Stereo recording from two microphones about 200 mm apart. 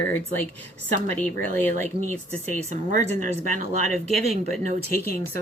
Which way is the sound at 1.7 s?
35° right (ahead or behind).